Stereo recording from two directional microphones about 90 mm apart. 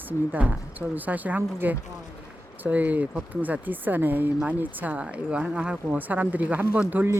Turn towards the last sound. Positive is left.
turn(degrees=-15)  # may be behind; listen again after turning